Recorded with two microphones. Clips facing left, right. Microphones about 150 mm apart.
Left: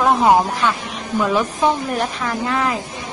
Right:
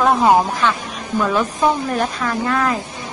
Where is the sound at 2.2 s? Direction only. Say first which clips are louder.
Right 1 dB; 15° left (ahead or behind).